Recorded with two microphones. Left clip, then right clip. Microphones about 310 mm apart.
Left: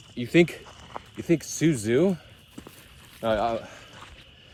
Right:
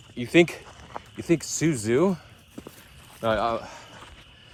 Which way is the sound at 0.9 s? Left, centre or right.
Centre.